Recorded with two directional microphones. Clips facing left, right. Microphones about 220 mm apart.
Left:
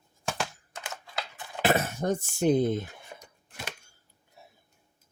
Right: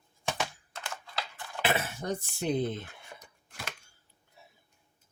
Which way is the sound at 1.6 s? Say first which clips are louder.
Left 5 dB; 45° left (ahead or behind).